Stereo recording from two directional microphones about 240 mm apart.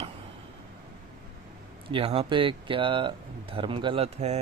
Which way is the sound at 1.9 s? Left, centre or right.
Right.